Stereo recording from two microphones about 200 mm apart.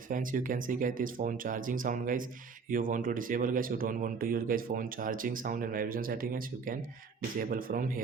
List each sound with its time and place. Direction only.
0.1 s speech: 40° right (ahead or behind)